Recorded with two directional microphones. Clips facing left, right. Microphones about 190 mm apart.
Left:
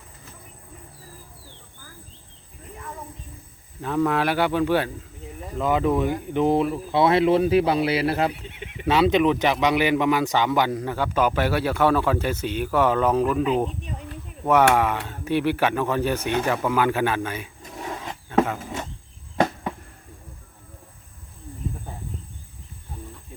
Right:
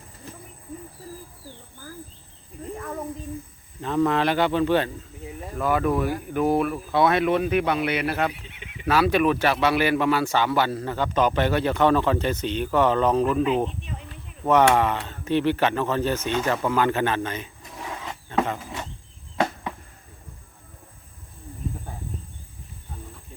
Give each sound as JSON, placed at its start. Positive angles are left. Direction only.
{"t": 3.8, "sound": "speech", "side_deg": 10}